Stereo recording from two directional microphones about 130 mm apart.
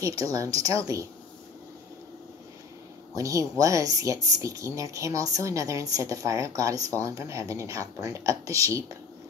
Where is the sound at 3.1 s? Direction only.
25° right (ahead or behind).